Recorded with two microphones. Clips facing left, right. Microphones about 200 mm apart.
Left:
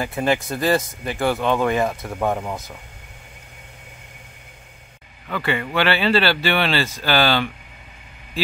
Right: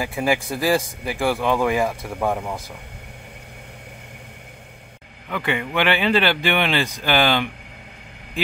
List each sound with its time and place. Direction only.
0.0 s speech: 10° right (ahead or behind)
2.1 s speech: 5° left (ahead or behind)
5.3 s speech: 15° right (ahead or behind)